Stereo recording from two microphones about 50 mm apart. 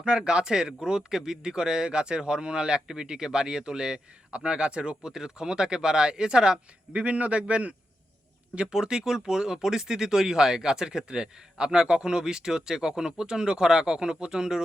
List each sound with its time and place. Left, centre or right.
0.0 s a man's voice: centre
7.0 s a man's voice: right
8.5 s a man's voice: centre